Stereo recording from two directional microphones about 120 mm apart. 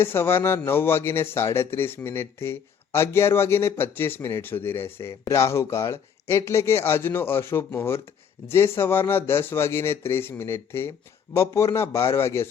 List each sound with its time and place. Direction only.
0.0 s speech: 20° left (ahead or behind)